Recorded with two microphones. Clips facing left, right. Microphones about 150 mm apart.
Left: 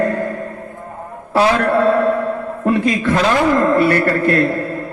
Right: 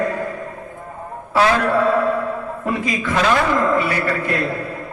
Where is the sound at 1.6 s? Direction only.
60° left (ahead or behind).